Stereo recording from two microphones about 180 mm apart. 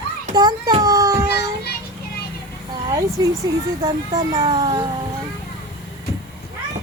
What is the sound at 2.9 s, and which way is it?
Speech, 20° right (ahead or behind).